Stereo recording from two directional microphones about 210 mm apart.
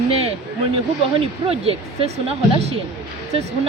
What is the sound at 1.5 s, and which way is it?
Speech, 30° right (ahead or behind).